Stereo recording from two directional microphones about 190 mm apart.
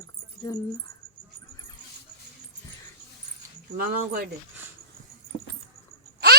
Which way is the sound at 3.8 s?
45° right (ahead or behind).